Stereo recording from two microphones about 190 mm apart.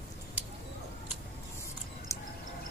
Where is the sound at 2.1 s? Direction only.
15° left (ahead or behind).